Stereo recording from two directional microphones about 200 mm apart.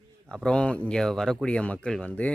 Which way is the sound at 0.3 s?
5° left (ahead or behind).